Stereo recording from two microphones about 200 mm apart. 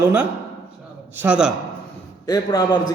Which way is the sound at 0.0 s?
10° right (ahead or behind).